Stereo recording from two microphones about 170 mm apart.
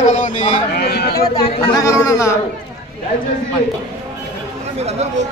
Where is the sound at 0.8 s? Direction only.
70° left (ahead or behind).